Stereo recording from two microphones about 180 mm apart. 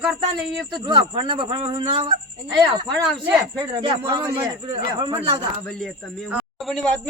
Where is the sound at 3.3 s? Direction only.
25° right (ahead or behind).